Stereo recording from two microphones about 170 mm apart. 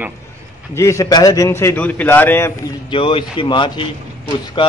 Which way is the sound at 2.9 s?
30° left (ahead or behind).